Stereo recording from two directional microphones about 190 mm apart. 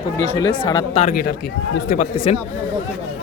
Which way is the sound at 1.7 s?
45° left (ahead or behind).